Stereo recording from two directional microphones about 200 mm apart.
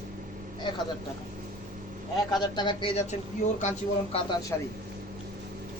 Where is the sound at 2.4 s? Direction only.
20° left (ahead or behind).